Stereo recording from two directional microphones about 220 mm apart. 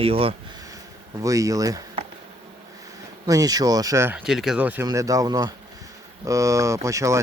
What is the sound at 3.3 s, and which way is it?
Speech, 15° right (ahead or behind).